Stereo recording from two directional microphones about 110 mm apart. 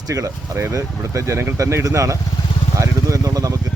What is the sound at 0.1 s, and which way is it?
Speech, 30° right (ahead or behind).